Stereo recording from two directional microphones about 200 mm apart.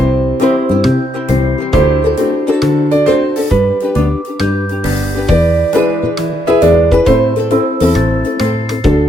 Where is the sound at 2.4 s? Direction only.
5° left (ahead or behind).